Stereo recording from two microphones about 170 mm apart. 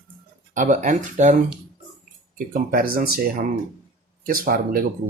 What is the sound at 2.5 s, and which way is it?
Speech, 60° right (ahead or behind).